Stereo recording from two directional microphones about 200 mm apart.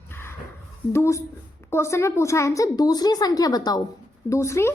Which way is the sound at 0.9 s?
15° left (ahead or behind).